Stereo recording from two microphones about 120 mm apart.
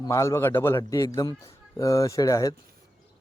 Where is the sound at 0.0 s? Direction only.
25° left (ahead or behind).